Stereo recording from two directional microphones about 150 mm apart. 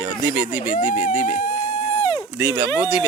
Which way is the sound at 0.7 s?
65° left (ahead or behind).